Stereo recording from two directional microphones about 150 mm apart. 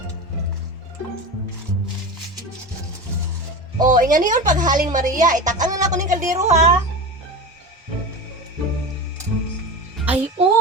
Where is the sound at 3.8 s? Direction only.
60° right (ahead or behind).